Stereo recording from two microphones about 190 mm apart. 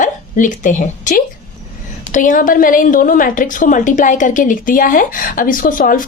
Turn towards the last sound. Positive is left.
turn(degrees=45)  # may be behind; listen again after turning